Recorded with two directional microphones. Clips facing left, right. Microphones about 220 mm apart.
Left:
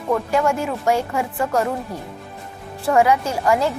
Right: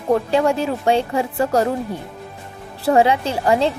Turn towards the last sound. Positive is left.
turn(degrees=-30)  # may be behind; listen again after turning